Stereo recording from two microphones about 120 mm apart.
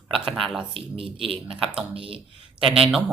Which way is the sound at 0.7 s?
50° right (ahead or behind).